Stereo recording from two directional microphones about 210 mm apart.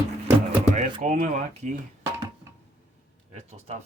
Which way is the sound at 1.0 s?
35° right (ahead or behind).